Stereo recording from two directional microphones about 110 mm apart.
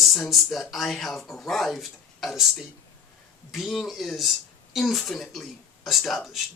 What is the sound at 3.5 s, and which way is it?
Speech, centre (ahead or behind).